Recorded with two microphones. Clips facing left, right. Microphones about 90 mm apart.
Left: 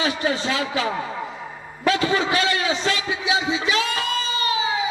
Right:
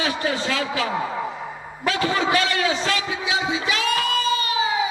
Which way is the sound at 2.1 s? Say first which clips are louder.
Even; 30° left (ahead or behind).